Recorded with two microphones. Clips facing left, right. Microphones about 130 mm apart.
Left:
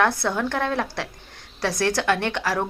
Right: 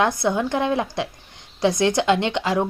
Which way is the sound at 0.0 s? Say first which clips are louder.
Right 2 dB; 15° right (ahead or behind).